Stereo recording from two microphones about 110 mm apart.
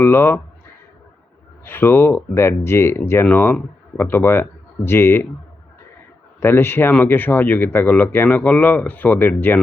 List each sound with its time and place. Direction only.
0.0 s speech: 20° left (ahead or behind)
1.6 s speech: 20° left (ahead or behind)
6.4 s speech: 20° left (ahead or behind)